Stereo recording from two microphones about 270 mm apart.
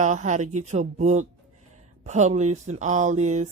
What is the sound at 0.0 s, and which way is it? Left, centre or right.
A woman's voice, right.